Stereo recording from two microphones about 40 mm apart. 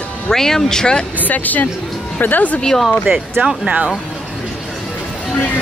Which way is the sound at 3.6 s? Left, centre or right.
Right.